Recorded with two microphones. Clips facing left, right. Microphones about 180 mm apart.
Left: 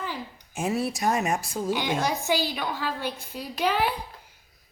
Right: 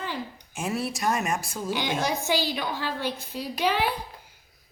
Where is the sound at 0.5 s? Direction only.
20° left (ahead or behind).